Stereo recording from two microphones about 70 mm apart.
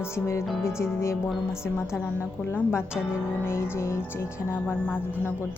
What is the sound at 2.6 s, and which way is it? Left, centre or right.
Speech, left.